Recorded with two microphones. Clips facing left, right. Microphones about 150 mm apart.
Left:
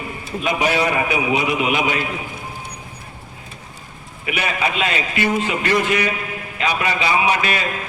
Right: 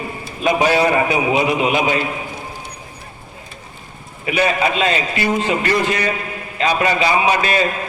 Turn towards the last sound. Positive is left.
turn(degrees=-35)  # may be behind; listen again after turning